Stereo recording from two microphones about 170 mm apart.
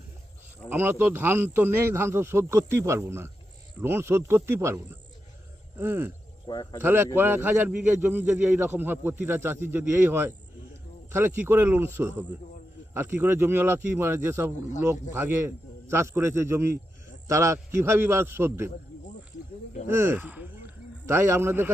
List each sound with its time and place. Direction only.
0.7 s a man's voice: 10° right (ahead or behind)
6.4 s a man's voice: 25° left (ahead or behind)
6.8 s a man's voice: 15° right (ahead or behind)
19.9 s a sound: 15° right (ahead or behind)